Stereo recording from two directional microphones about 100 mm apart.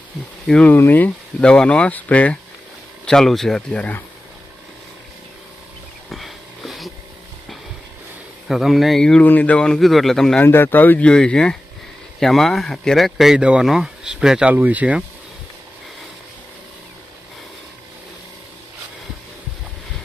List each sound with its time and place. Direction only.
0.4 s speech: 10° left (ahead or behind)
6.1 s wheeze: centre (ahead or behind)
8.4 s speech: centre (ahead or behind)
10.4 s speech: 20° left (ahead or behind); by 14.5 s 5° right (ahead or behind)
14.5 s speech: 15° right (ahead or behind)